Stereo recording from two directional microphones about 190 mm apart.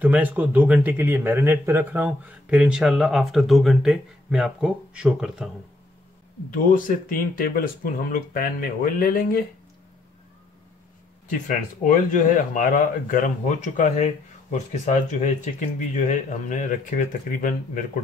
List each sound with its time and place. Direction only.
0.0 s a man's voice: 10° right (ahead or behind)
6.5 s speech: 45° left (ahead or behind)
11.2 s speech: 40° left (ahead or behind)